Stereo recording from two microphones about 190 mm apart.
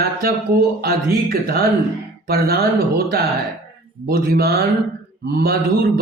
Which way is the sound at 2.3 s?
55° right (ahead or behind).